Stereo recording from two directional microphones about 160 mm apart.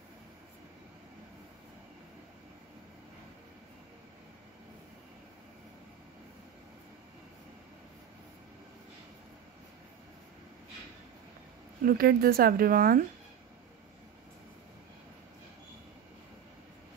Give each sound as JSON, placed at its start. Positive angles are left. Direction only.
{"t": 11.8, "sound": "speech", "side_deg": -70}